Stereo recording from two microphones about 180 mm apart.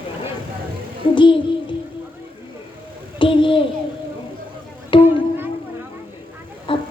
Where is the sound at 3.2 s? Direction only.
30° left (ahead or behind).